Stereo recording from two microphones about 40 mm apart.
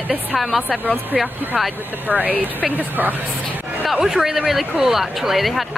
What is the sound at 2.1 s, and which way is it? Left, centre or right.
Speech, right.